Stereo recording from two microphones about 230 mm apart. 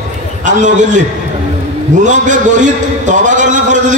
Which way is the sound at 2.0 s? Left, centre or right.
Right.